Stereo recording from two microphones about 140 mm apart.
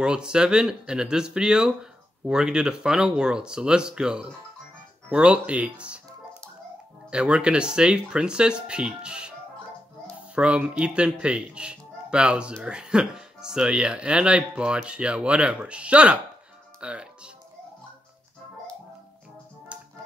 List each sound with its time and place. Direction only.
0.0 s speech: 5° right (ahead or behind)
7.1 s speech: 5° right (ahead or behind)
10.3 s speech: 10° right (ahead or behind)
19.7 s music: 10° right (ahead or behind)